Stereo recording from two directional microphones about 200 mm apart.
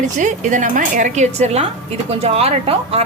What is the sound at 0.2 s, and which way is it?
Speech, 40° right (ahead or behind).